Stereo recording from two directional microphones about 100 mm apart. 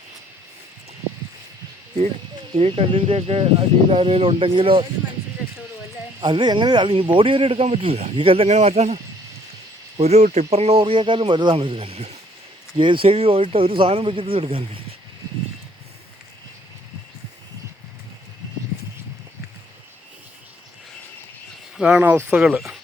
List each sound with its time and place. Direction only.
2.6 s speech: 70° right (ahead or behind)
6.1 s speech: 50° right (ahead or behind); by 9.0 s 90° right
10.0 s speech: 90° right
12.7 s speech: 55° right (ahead or behind)
21.8 s speech: 10° right (ahead or behind)
22.4 s speech: centre (ahead or behind)